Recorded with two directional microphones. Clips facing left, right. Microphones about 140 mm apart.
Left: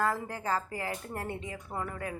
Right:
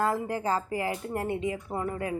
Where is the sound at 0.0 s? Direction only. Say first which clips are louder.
Right 4 dB; 20° right (ahead or behind).